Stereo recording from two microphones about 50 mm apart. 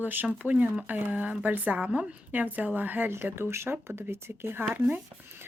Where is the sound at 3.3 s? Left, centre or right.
Right.